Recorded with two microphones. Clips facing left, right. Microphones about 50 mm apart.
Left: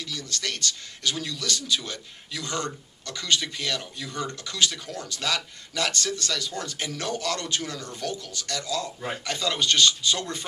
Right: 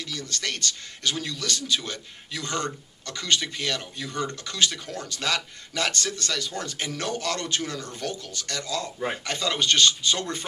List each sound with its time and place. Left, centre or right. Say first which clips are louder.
0.0 s speech: right 1 dB; right